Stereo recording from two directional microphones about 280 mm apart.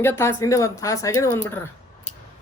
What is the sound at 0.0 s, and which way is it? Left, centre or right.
Speech, centre.